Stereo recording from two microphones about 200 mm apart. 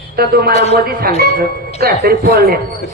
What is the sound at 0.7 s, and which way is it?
Speech, 50° right (ahead or behind).